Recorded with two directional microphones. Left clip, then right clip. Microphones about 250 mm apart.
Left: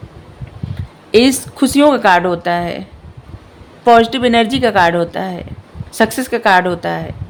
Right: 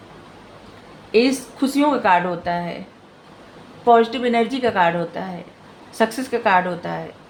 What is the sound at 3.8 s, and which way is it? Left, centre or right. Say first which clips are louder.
Speech: left 6 dB; left.